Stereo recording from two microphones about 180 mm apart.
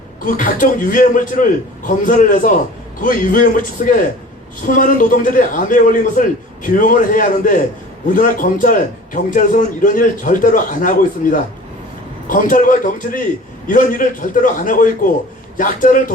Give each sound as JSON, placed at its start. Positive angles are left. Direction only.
{"t": 0.3, "sound": "a man's voice", "side_deg": 50}